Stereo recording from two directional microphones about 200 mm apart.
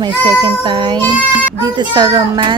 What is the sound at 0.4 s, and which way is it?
A woman's voice, 25° right (ahead or behind).